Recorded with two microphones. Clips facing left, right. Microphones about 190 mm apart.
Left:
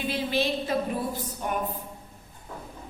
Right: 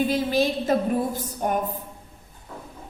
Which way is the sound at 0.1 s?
45° right (ahead or behind).